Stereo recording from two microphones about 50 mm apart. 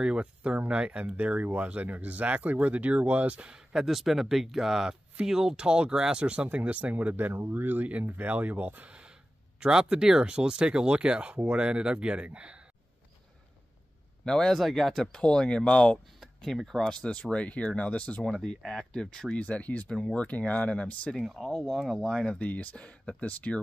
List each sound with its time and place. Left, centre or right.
0.0 s speech: right
3.4 s speech: centre; by 7.3 s right
7.3 s speech: right
14.2 s speech: centre
16.5 s speech: centre
16.8 s speech: centre
18.2 s speech: centre
19.3 s speech: left
21.4 s speech: centre
22.4 s speech: left